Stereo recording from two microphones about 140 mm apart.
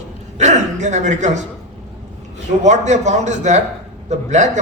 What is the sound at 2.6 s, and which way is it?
A man's voice, 55° right (ahead or behind).